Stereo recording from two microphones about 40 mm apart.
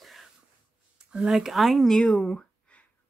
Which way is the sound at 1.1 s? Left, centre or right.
Centre.